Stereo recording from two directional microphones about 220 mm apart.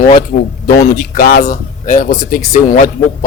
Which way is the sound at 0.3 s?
35° left (ahead or behind).